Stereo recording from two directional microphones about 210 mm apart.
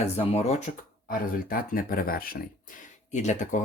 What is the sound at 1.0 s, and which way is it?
Speech, 45° left (ahead or behind).